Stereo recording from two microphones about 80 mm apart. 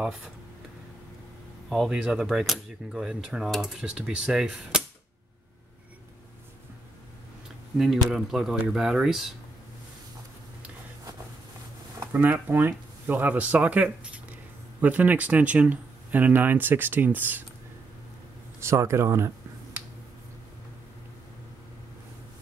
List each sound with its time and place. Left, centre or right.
0.0 s speech: centre
1.7 s speech: centre
7.7 s speech: centre
12.1 s speech: right
18.6 s speech: right